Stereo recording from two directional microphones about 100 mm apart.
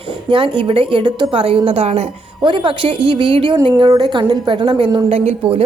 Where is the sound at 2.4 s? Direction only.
55° right (ahead or behind).